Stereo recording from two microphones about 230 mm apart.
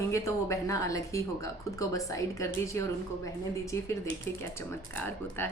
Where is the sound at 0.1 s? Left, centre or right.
Centre.